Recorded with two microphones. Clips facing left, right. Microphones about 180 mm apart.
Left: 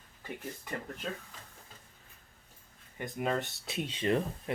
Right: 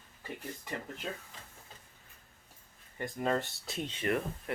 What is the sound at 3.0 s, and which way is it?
Speech, 10° left (ahead or behind).